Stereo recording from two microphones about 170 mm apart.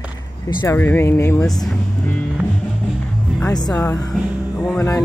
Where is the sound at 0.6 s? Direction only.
10° left (ahead or behind).